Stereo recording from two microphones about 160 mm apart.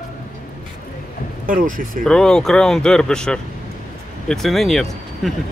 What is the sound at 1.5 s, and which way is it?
Speech, 60° right (ahead or behind).